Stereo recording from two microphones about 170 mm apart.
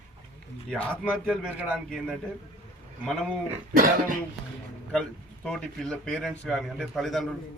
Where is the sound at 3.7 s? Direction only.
55° right (ahead or behind).